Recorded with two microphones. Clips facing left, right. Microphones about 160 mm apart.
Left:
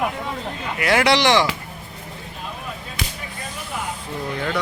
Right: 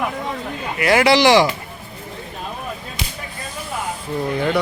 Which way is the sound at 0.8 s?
Centre (ahead or behind).